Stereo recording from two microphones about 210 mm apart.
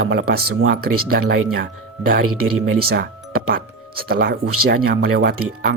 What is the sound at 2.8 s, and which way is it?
Speech, 45° right (ahead or behind).